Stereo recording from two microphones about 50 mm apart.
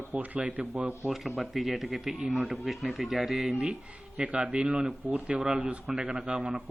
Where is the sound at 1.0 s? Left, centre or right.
Centre.